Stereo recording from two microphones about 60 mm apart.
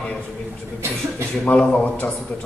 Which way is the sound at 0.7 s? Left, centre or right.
Right.